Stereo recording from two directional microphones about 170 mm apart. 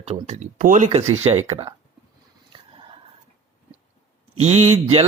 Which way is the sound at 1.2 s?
35° right (ahead or behind).